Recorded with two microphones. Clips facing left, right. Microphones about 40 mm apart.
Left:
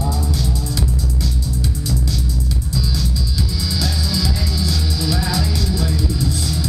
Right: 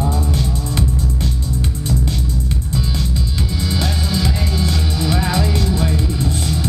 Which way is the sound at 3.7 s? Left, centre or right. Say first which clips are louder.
Right 2 dB; right.